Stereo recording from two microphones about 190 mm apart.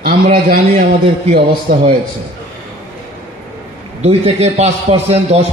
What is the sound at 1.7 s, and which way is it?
Speech, 50° right (ahead or behind).